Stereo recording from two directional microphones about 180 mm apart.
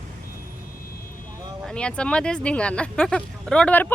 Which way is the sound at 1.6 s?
5° left (ahead or behind).